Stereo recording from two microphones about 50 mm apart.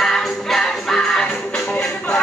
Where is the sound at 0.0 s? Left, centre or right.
Centre.